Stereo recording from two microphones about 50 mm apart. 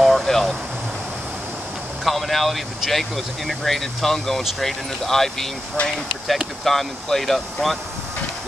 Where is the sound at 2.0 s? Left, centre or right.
Centre.